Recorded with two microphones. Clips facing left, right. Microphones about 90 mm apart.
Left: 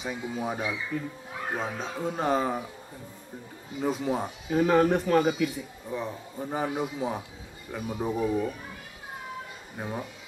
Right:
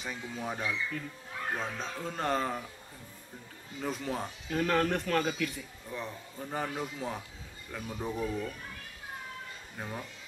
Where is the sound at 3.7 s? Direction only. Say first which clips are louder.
Left 7 dB; 10° left (ahead or behind).